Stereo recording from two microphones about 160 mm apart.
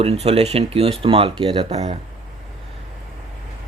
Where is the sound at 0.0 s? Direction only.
40° right (ahead or behind).